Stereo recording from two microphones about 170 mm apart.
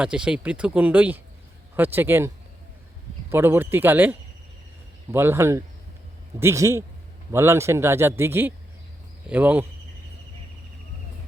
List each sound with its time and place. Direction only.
0.0 s speech: 5° right (ahead or behind)